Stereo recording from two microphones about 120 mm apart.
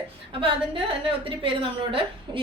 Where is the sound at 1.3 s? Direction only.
45° right (ahead or behind).